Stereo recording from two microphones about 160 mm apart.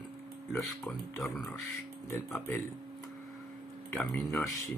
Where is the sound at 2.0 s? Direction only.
15° left (ahead or behind).